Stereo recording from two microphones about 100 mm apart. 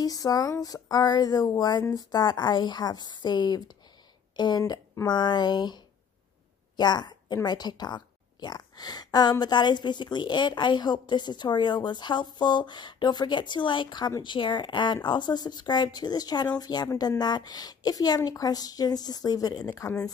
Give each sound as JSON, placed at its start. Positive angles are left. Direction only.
{"t": 0.0, "sound": "a woman's voice", "side_deg": 40}
{"t": 6.8, "sound": "a woman's voice", "side_deg": 45}